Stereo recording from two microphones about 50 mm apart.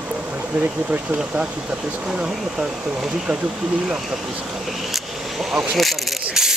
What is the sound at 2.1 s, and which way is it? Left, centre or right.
Speech, right.